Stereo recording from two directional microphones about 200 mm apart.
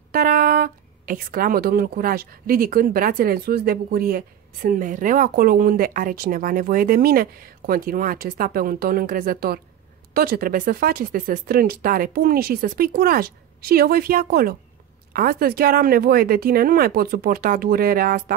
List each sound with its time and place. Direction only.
0.1 s speech: 45° right (ahead or behind)